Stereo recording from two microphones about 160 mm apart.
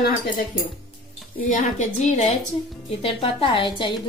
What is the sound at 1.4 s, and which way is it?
Speech, 50° left (ahead or behind).